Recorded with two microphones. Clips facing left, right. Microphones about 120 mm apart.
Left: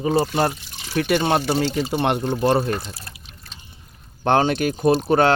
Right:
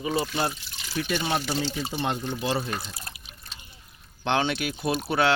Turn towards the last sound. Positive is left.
turn(degrees=40)  # may be behind; listen again after turning